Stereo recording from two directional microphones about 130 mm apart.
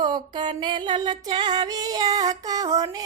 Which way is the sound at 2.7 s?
30° right (ahead or behind).